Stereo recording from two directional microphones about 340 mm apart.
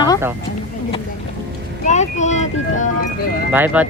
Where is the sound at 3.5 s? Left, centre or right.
Centre.